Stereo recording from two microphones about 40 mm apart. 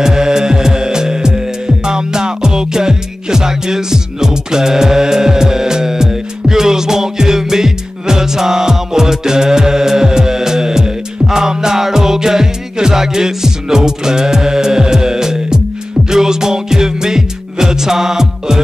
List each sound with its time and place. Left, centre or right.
0.0 s music: centre